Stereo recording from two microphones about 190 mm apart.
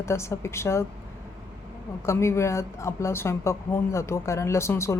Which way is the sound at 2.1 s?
15° left (ahead or behind).